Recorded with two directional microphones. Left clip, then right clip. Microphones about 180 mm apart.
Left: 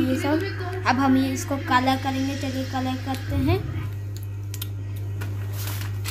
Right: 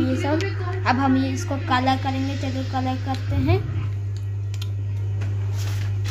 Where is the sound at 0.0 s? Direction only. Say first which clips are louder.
Even; centre (ahead or behind).